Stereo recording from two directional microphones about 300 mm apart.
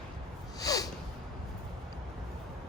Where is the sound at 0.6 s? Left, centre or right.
Centre.